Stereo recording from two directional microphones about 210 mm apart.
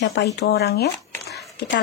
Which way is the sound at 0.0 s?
55° left (ahead or behind).